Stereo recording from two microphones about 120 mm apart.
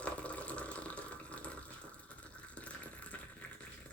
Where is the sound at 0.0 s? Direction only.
10° left (ahead or behind).